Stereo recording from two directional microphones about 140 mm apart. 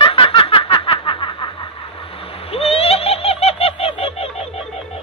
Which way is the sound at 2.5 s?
45° left (ahead or behind).